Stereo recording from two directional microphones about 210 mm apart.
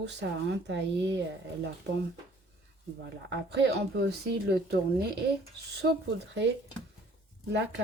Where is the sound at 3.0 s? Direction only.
55° right (ahead or behind).